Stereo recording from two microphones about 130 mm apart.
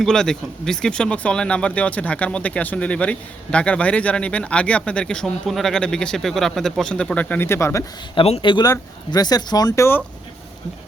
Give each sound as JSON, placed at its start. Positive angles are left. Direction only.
{"t": 0.0, "sound": "speech", "side_deg": 5}
{"t": 8.1, "sound": "speech", "side_deg": 45}